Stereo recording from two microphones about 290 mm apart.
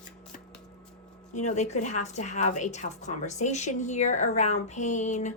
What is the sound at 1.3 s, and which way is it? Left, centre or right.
Speech, left.